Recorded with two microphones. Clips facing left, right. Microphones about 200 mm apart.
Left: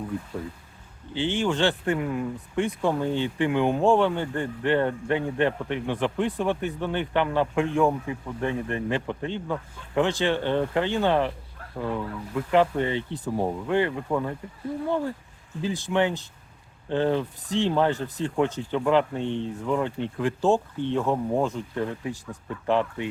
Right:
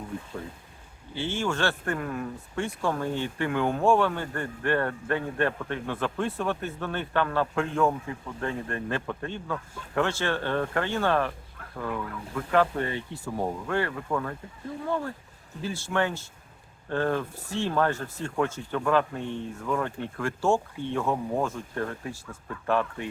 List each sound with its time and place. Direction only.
1.1 s speech: 15° left (ahead or behind)
15.6 s speech: 15° left (ahead or behind)